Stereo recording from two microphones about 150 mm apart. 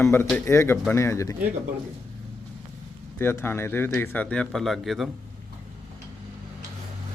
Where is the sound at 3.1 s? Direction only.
15° left (ahead or behind); by 5.1 s centre (ahead or behind).